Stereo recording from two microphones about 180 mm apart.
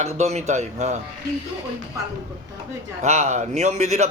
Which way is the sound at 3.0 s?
40° right (ahead or behind).